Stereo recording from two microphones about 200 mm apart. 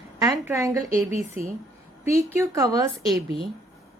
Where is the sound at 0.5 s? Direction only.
15° right (ahead or behind).